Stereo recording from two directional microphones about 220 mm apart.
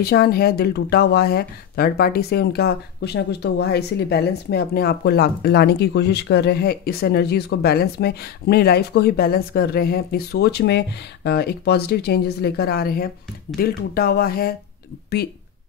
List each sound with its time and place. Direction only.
0.0 s speech: 45° left (ahead or behind)